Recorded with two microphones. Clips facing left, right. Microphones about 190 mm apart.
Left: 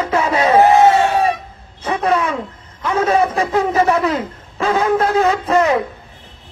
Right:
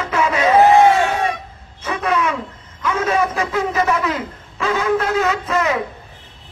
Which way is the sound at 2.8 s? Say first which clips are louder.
Left 3 dB; 35° left (ahead or behind).